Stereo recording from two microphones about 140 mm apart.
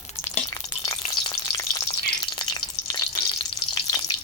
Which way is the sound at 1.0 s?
40° left (ahead or behind).